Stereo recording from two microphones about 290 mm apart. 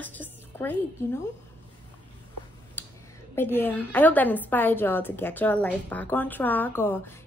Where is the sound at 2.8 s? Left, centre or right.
Centre.